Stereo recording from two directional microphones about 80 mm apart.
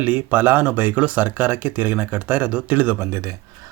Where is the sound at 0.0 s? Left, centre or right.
Right.